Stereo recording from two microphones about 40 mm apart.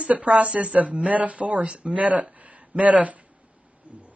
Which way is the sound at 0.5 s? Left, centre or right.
Right.